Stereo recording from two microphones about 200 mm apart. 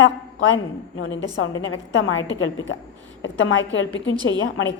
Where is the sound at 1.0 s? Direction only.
90° left.